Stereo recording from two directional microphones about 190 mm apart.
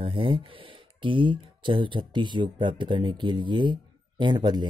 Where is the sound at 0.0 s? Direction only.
25° right (ahead or behind).